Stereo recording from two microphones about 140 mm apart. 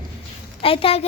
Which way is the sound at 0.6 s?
40° left (ahead or behind).